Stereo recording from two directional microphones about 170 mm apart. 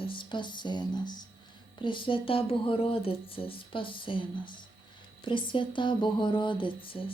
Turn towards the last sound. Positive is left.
turn(degrees=30)  # may be behind; listen again after turning